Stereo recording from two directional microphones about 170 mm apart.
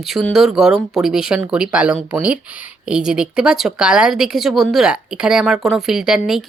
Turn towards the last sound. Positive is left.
turn(degrees=-5)  # may be behind; listen again after turning